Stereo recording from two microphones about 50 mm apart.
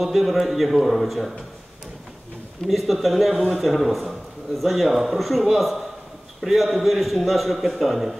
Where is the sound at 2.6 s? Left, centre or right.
Centre.